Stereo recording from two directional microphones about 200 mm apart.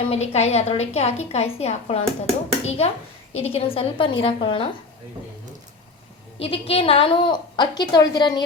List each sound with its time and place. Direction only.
0.0 s a woman's voice: 30° left (ahead or behind)
6.4 s a woman's voice: 30° left (ahead or behind)